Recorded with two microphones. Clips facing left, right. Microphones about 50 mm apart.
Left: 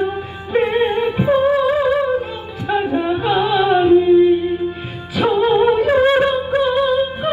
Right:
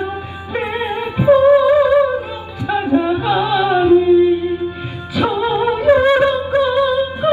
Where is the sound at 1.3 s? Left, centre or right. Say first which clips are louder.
Right 7 dB; left.